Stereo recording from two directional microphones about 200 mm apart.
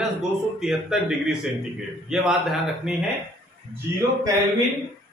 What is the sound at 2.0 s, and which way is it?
Speech, 5° right (ahead or behind).